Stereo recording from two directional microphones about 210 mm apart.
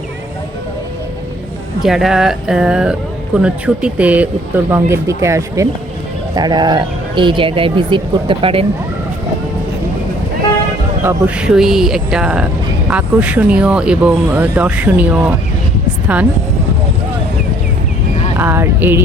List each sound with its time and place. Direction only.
1.8 s speech: centre (ahead or behind); by 8.6 s 25° right (ahead or behind)
11.0 s speech: 5° right (ahead or behind)
18.3 s a sound: 10° right (ahead or behind)